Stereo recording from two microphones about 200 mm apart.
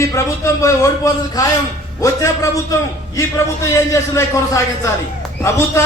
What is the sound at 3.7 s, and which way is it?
A man's voice, 15° left (ahead or behind).